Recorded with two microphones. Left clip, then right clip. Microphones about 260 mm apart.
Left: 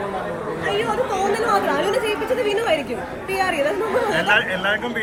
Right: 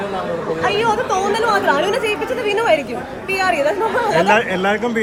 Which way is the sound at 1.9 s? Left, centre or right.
Centre.